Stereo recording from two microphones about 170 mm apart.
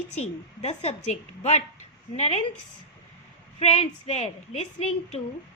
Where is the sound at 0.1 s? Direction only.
40° left (ahead or behind).